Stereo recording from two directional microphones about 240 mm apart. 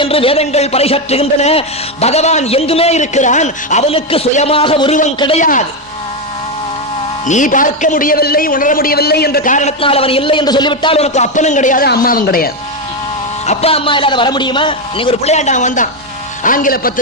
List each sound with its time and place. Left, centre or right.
0.0 s a man's voice: left
7.3 s a man's voice: left
13.4 s a man's voice: left